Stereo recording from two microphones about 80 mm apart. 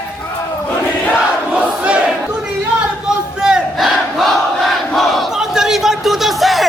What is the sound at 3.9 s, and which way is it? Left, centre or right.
Crowd, centre.